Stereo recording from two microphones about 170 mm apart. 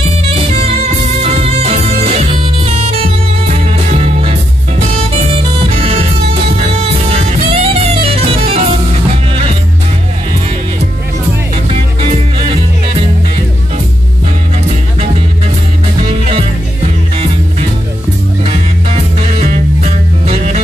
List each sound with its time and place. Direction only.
1.2 s music: 35° right (ahead or behind)
7.1 s music: 35° right (ahead or behind)
12.0 s music: 35° right (ahead or behind)
16.1 s music: 35° right (ahead or behind)
18.4 s music: 40° right (ahead or behind)